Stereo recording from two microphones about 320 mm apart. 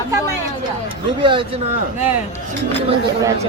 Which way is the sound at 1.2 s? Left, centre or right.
Centre.